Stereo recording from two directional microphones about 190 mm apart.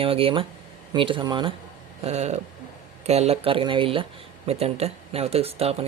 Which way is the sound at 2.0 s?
35° right (ahead or behind).